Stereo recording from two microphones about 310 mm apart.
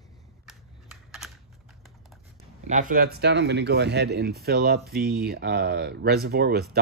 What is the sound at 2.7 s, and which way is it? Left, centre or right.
Speech, right.